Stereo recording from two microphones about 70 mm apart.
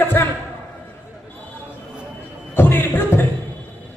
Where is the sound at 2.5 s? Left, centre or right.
Left.